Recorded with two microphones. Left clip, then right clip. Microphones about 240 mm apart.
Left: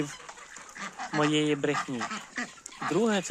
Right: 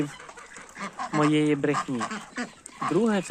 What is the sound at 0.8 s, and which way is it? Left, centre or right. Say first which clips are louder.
Duck: right 3 dB; right.